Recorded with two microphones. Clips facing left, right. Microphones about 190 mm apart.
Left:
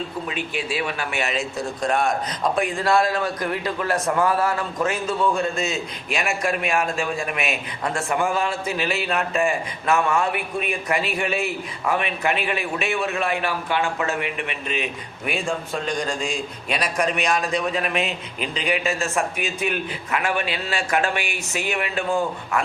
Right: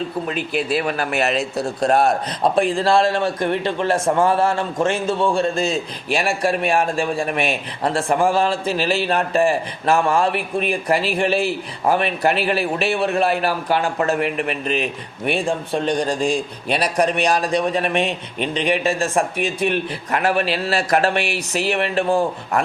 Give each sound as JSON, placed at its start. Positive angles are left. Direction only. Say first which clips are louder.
{"t": 0.3, "sound": "a man's voice", "louder": "right 6 dB", "side_deg": -45}
{"t": 15.3, "sound": "a man's voice", "louder": "right 5 dB", "side_deg": -30}